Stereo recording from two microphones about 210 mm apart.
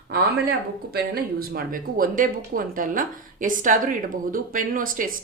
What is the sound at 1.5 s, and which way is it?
Speech, 45° right (ahead or behind).